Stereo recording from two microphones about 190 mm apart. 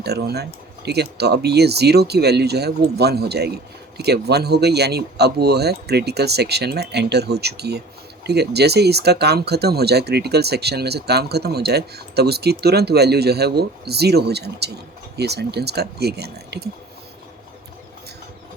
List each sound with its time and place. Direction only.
0.0 s speech: 60° right (ahead or behind)